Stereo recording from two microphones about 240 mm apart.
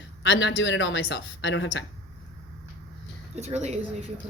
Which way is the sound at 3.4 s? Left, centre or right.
Right.